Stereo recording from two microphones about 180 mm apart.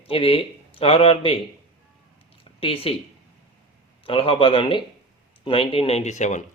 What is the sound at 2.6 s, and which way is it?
Speech, 30° left (ahead or behind).